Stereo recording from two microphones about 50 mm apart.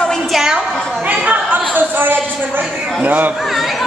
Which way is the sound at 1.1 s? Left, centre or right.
Right.